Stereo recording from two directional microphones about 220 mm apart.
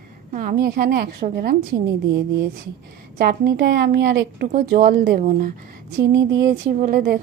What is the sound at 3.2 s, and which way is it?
A woman's voice, 45° right (ahead or behind).